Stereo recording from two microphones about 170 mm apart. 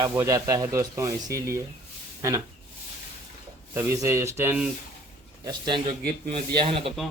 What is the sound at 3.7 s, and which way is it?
Speech, 15° right (ahead or behind).